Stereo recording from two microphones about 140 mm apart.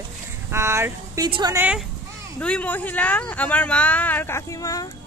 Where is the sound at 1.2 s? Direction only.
30° right (ahead or behind).